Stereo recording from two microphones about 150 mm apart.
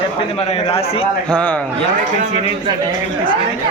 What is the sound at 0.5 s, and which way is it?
Speech, 40° left (ahead or behind).